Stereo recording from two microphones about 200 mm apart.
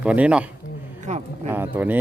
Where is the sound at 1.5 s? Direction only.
10° right (ahead or behind).